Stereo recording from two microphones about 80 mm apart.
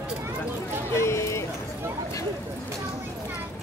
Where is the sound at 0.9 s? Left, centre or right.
Left.